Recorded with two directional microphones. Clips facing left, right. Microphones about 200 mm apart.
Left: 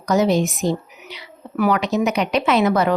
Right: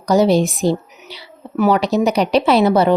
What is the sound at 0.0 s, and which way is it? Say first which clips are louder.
Speech: right 4 dB; 35° right (ahead or behind).